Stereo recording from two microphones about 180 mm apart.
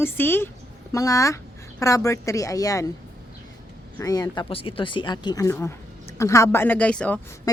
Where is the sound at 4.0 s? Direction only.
20° left (ahead or behind).